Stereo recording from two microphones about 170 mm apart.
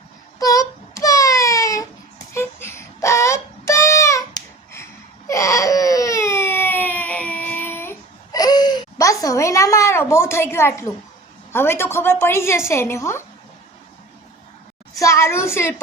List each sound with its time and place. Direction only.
0.3 s baby cry: 20° left (ahead or behind)
11.5 s a woman's voice: 15° left (ahead or behind)
14.9 s a woman's voice: 15° left (ahead or behind)